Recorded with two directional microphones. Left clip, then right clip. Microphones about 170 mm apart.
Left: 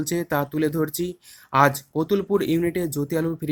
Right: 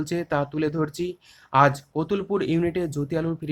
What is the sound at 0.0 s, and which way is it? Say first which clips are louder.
Speech: left 1 dB; 20° left (ahead or behind).